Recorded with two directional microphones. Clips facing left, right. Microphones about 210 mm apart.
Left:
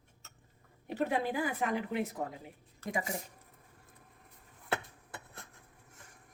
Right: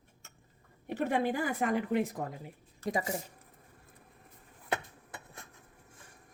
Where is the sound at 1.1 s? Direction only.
50° right (ahead or behind).